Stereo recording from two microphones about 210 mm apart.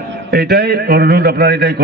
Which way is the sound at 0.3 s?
50° right (ahead or behind).